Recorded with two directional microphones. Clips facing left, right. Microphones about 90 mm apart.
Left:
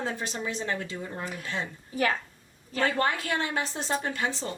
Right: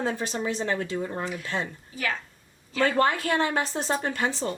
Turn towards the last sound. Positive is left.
turn(degrees=-45)  # may be behind; listen again after turning